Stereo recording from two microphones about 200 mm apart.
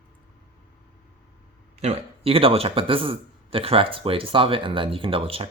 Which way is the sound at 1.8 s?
30° right (ahead or behind).